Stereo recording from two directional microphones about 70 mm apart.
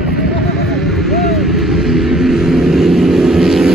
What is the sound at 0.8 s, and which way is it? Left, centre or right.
Vehicle, centre.